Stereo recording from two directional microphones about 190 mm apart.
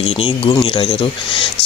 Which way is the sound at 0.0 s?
30° left (ahead or behind).